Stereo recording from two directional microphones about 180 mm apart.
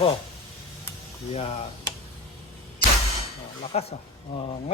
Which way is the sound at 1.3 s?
35° left (ahead or behind).